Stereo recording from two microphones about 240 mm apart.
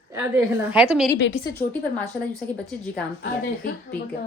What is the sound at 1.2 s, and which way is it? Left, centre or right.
Speech, left.